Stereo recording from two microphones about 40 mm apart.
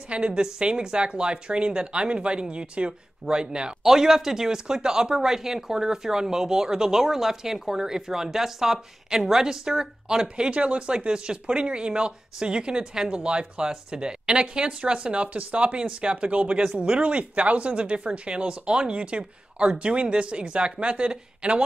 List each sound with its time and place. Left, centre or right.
0.1 s speech: right
3.8 s speech: centre
10.2 s speech: right